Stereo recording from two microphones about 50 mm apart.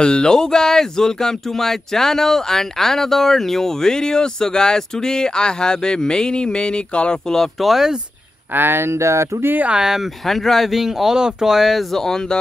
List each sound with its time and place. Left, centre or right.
0.0 s speech: centre
7.6 s speech: centre
8.5 s speech: right
9.0 s speech: right
10.2 s speech: centre
11.9 s speech: centre